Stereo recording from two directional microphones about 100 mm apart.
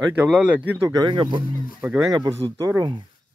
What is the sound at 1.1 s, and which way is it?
Speech, 50° right (ahead or behind).